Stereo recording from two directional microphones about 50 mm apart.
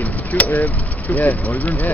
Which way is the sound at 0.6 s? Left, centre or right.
Left.